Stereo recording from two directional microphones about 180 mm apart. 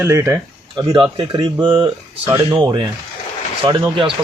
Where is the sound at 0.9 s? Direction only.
25° right (ahead or behind).